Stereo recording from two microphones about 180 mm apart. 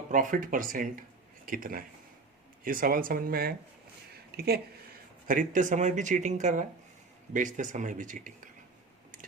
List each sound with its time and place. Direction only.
0.1 s speech: 45° right (ahead or behind)
5.3 s speech: 45° right (ahead or behind)